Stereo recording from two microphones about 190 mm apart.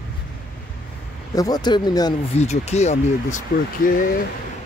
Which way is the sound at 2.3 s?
35° left (ahead or behind).